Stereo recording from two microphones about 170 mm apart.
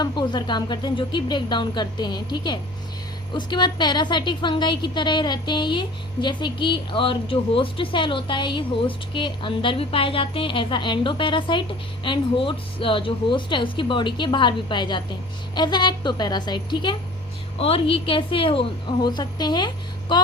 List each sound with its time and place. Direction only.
0.0 s a woman's voice: 25° left (ahead or behind)